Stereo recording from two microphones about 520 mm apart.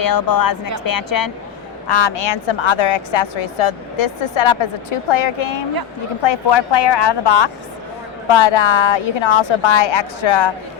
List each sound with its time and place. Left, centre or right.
0.0 s speech: left
2.2 s a woman's voice: left